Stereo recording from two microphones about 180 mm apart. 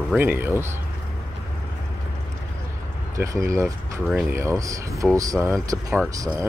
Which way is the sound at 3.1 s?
15° right (ahead or behind).